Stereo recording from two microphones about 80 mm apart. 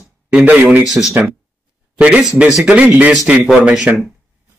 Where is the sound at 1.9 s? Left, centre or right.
Centre.